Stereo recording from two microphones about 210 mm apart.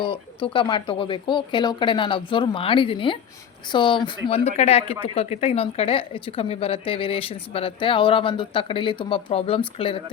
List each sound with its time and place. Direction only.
0.0 s speech: 25° left (ahead or behind)